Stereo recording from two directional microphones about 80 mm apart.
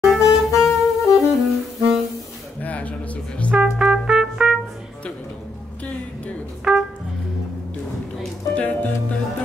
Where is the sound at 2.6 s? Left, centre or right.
Centre.